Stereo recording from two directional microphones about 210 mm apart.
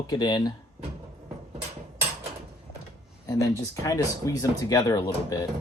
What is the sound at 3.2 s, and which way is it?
Speech, 15° left (ahead or behind).